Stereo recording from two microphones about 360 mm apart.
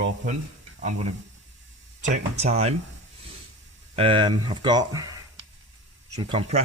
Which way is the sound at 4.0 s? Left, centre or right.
Centre.